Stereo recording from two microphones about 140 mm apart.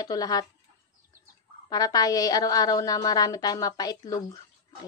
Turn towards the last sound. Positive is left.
turn(degrees=25)  # may be behind; listen again after turning